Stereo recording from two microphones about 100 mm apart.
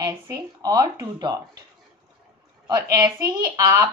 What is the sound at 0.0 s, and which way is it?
Speech, 40° right (ahead or behind).